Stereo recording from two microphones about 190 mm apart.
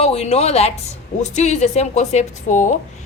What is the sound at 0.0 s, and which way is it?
Speech, 35° left (ahead or behind).